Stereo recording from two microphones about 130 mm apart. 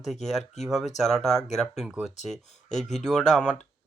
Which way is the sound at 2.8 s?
5° left (ahead or behind).